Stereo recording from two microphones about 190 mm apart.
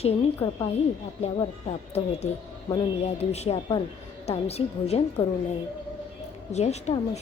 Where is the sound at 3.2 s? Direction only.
35° left (ahead or behind).